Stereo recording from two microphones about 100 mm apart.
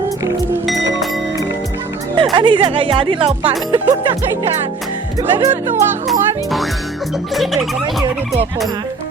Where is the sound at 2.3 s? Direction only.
50° right (ahead or behind).